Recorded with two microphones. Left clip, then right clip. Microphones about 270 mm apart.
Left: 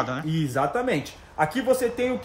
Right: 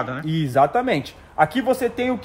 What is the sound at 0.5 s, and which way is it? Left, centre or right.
A man's voice, centre.